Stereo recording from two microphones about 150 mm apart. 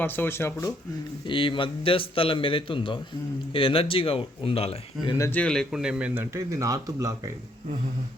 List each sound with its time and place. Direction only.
0.0 s speech: 15° left (ahead or behind)
1.3 s a man's voice: 35° left (ahead or behind)
5.0 s speech: 20° left (ahead or behind)
5.4 s speech: 5° left (ahead or behind)
6.3 s speech: 20° right (ahead or behind)